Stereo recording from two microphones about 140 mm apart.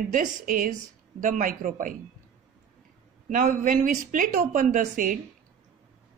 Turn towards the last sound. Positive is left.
turn(degrees=-70)  # may be behind; listen again after turning